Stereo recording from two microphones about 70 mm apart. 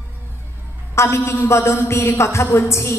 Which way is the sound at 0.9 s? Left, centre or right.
Left.